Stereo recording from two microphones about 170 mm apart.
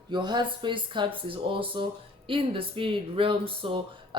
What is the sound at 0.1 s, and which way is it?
Speech, 25° right (ahead or behind).